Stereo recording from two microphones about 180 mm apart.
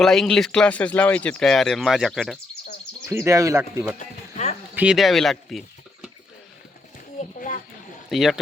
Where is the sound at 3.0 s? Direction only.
15° right (ahead or behind).